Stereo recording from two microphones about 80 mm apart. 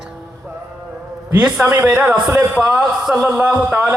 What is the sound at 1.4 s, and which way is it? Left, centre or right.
Music, centre.